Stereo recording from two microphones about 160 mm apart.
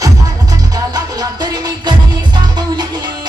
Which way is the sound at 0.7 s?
25° right (ahead or behind).